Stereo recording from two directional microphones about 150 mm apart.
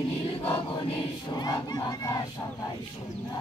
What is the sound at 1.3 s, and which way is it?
Crowd, 25° left (ahead or behind).